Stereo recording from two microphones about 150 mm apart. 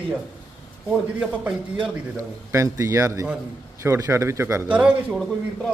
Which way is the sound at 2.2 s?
20° right (ahead or behind).